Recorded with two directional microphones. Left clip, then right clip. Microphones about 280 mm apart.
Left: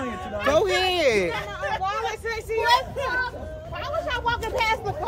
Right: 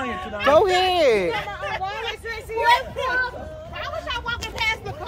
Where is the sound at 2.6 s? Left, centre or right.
Centre.